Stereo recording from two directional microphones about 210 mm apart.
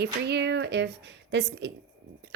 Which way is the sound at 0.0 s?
55° right (ahead or behind).